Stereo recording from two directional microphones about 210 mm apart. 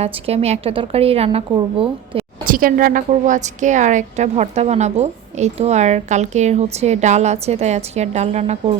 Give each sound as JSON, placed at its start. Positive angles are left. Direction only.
{"t": 0.0, "sound": "a woman's voice", "side_deg": -30}
{"t": 2.5, "sound": "a woman's voice", "side_deg": -40}